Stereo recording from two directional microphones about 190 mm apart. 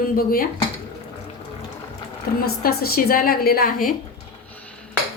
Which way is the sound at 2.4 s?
50° left (ahead or behind).